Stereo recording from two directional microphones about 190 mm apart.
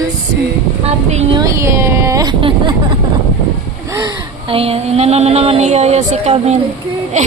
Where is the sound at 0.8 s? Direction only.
35° right (ahead or behind).